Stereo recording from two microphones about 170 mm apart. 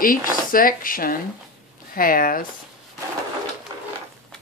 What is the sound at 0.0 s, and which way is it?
Speech, 55° left (ahead or behind).